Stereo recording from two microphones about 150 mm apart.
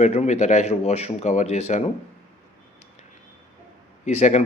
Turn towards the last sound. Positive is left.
turn(degrees=50)  # may be behind; listen again after turning